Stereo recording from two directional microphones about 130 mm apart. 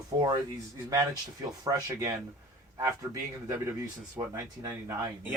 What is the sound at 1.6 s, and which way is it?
Speech, 25° right (ahead or behind).